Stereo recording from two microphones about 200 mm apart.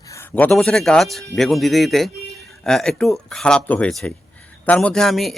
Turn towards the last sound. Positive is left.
turn(degrees=0)  # may be behind; listen again after turning